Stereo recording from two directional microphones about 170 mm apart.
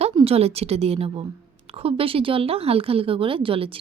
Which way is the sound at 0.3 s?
35° right (ahead or behind).